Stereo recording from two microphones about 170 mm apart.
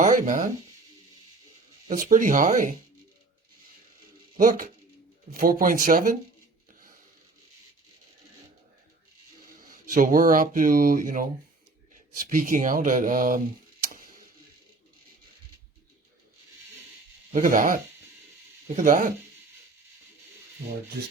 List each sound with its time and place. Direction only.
0.0 s speech: 50° right (ahead or behind)
1.9 s speech: 50° right (ahead or behind)
4.4 s speech: 50° right (ahead or behind)
9.6 s speech: 55° right (ahead or behind)
17.3 s speech: 50° right (ahead or behind)
18.8 s speech: 50° right (ahead or behind)